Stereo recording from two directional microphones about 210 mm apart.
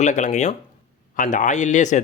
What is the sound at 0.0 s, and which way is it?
A man's voice, 35° left (ahead or behind).